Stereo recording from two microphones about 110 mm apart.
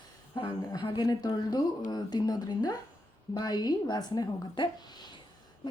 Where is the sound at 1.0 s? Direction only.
35° left (ahead or behind).